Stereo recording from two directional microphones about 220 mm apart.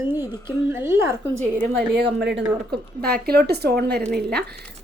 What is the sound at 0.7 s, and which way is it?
Speech, 10° right (ahead or behind).